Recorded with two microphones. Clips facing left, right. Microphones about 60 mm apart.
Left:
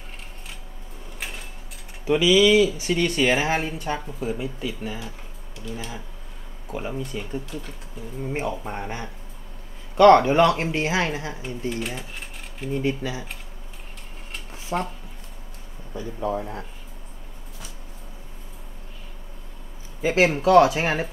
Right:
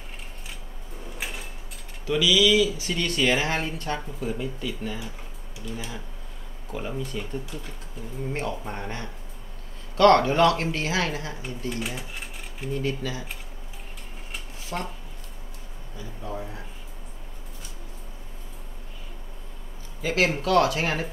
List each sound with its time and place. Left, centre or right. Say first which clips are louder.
2.0 s speech: left 4 dB; left
2.8 s speech: left 4 dB; left
11.7 s speech: left 2 dB; centre
12.7 s speech: left 3 dB; centre
14.7 s speech: left 5 dB; left
20.0 s speech: left 4 dB; left